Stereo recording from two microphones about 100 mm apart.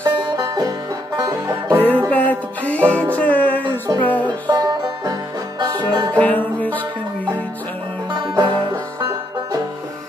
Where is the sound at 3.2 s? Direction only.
15° left (ahead or behind).